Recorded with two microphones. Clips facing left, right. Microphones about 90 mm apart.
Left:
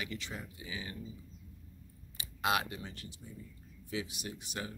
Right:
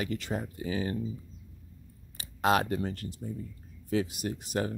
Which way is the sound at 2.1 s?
40° right (ahead or behind).